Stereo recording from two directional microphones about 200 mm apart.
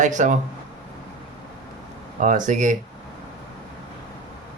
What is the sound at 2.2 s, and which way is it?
Speech, 40° right (ahead or behind).